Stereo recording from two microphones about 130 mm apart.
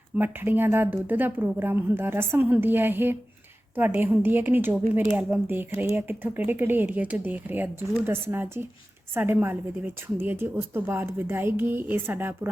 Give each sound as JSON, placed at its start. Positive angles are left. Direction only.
{"t": 0.2, "sound": "speech", "side_deg": -15}